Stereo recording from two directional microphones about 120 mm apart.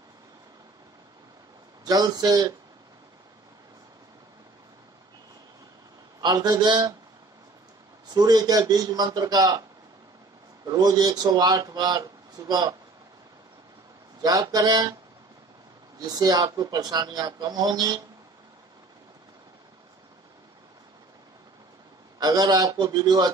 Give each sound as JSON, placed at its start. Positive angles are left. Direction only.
{"t": 1.9, "sound": "a man's voice", "side_deg": -35}
{"t": 6.2, "sound": "a man's voice", "side_deg": -35}
{"t": 8.1, "sound": "a man's voice", "side_deg": -35}
{"t": 14.2, "sound": "a man's voice", "side_deg": -35}
{"t": 16.0, "sound": "a man's voice", "side_deg": -35}
{"t": 22.2, "sound": "a man's voice", "side_deg": -35}